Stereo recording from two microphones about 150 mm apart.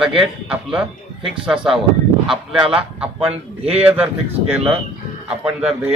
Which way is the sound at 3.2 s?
40° right (ahead or behind).